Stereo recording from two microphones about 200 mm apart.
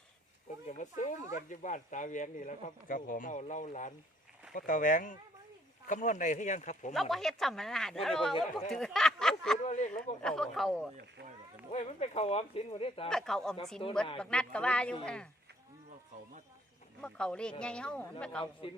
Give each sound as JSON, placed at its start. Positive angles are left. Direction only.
{"t": 0.7, "sound": "speech", "side_deg": 40}
{"t": 6.9, "sound": "speech", "side_deg": 0}
{"t": 8.7, "sound": "a sound", "side_deg": 0}
{"t": 9.6, "sound": "speech", "side_deg": 35}
{"t": 10.2, "sound": "speech", "side_deg": 5}
{"t": 11.7, "sound": "speech", "side_deg": 30}
{"t": 13.1, "sound": "speech", "side_deg": 0}
{"t": 13.8, "sound": "a woman's voice", "side_deg": 25}
{"t": 14.2, "sound": "speech", "side_deg": 5}
{"t": 17.0, "sound": "speech", "side_deg": 5}